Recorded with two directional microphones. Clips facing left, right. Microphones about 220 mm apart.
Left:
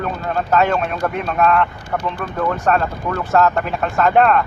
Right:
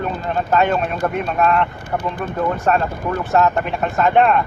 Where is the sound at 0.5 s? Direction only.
Centre (ahead or behind).